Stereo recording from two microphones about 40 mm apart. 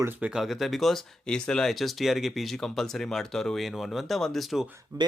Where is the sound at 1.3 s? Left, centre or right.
Centre.